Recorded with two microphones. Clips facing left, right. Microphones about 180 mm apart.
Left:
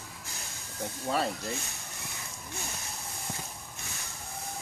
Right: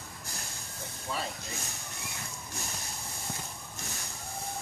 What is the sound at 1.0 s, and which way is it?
Speech, 65° left (ahead or behind).